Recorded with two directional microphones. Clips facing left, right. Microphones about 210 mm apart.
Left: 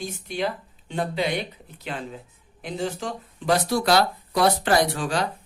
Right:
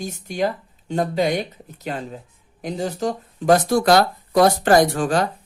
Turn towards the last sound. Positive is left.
turn(degrees=-50)  # may be behind; listen again after turning